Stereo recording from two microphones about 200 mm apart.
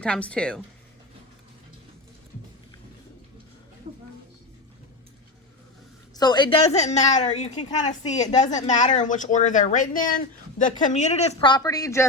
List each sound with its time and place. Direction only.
0.0 s speech: 5° left (ahead or behind)
6.1 s speech: 20° left (ahead or behind)